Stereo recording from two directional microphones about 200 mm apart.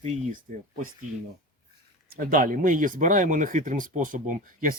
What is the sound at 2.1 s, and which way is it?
Speech, 45° right (ahead or behind).